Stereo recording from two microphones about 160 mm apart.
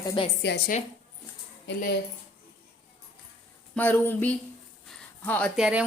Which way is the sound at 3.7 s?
10° left (ahead or behind).